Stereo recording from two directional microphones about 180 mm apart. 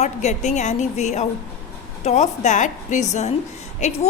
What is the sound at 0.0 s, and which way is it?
A woman's voice, 40° left (ahead or behind).